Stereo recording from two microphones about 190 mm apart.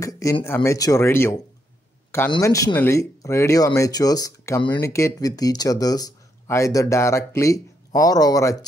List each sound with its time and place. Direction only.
0.0 s speech: 15° left (ahead or behind)